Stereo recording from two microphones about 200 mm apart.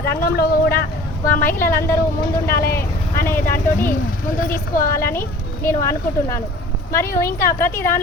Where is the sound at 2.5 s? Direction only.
50° left (ahead or behind).